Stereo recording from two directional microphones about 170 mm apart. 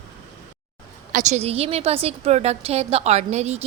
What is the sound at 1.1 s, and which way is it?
A woman's voice, 40° right (ahead or behind).